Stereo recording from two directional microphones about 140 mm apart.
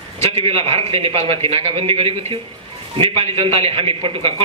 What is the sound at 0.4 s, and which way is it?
A man's voice, 45° right (ahead or behind).